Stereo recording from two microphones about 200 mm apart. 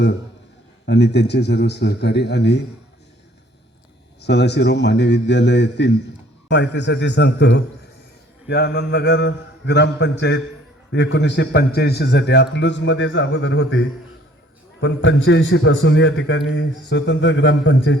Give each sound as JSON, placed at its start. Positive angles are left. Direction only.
{"t": 0.9, "sound": "a man's voice", "side_deg": 55}
{"t": 4.2, "sound": "a man's voice", "side_deg": 55}